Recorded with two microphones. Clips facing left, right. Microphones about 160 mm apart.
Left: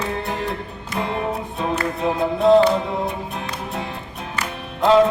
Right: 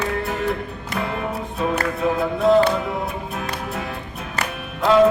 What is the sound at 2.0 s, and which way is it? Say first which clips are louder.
Speech: right 1 dB; 25° left (ahead or behind).